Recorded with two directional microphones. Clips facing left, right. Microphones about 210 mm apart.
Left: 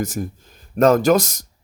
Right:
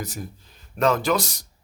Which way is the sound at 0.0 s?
50° left (ahead or behind).